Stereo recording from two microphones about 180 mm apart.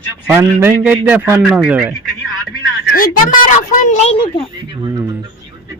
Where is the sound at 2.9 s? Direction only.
50° left (ahead or behind).